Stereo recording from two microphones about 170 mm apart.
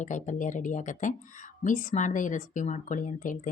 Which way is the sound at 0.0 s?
45° left (ahead or behind).